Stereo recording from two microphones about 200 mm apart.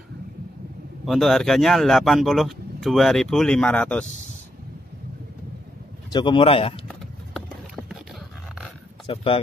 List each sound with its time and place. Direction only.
1.0 s a man's voice: centre (ahead or behind)
6.1 s speech: 25° left (ahead or behind)
6.9 s clip-clop: centre (ahead or behind)
9.0 s speech: 25° left (ahead or behind)